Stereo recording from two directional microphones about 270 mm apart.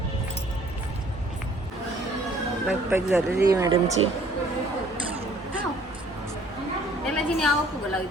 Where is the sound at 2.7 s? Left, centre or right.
Centre.